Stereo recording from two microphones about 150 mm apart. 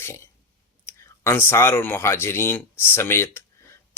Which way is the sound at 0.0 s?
15° left (ahead or behind).